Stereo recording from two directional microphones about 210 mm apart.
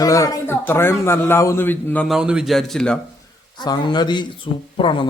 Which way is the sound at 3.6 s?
20° left (ahead or behind).